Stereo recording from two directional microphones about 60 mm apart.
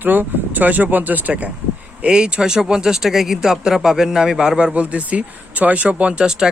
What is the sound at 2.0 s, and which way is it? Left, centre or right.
Speech, centre.